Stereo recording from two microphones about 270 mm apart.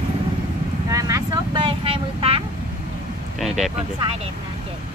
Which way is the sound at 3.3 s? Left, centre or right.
Centre.